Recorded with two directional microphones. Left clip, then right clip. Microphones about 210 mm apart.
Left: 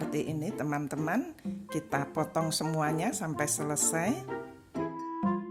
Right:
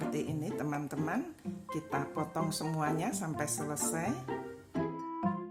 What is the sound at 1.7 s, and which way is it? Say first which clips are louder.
Speech: left 3 dB; 35° left (ahead or behind).